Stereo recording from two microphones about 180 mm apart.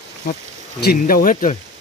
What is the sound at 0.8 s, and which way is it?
Speech, 50° left (ahead or behind).